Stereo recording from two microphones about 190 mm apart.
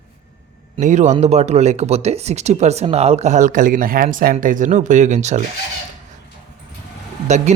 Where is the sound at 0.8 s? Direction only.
40° right (ahead or behind).